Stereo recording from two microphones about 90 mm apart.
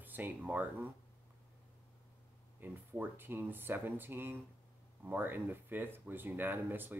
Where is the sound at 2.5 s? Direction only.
20° right (ahead or behind).